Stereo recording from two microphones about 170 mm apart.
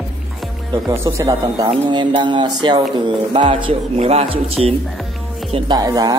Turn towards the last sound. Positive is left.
turn(degrees=-20)  # may be behind; listen again after turning